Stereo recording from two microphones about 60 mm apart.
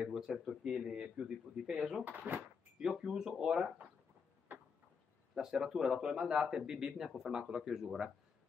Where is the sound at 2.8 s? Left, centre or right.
Centre.